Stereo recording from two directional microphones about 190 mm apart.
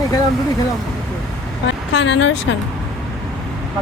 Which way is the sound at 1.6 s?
70° left (ahead or behind).